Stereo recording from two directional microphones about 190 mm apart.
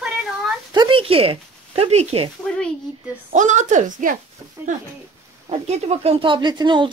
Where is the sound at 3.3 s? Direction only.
40° right (ahead or behind).